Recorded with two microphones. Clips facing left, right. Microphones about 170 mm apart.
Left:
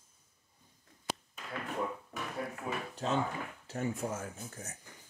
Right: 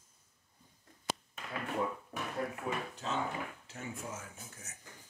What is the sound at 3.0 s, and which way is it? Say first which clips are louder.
Speech: left 5 dB; 45° left (ahead or behind).